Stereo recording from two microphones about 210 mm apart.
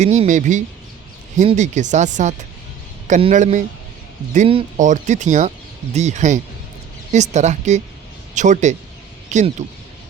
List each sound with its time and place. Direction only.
0.0 s speech: 35° right (ahead or behind)